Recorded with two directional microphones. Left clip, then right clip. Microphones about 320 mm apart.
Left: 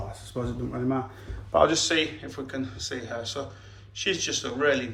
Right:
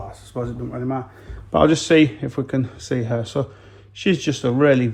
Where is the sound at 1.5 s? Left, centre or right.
Right.